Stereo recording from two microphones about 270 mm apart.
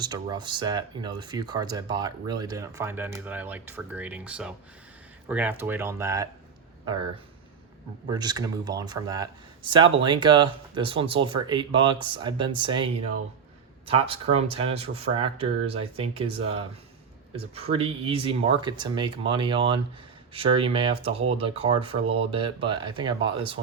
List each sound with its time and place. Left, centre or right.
0.0 s speech: centre
8.0 s speech: centre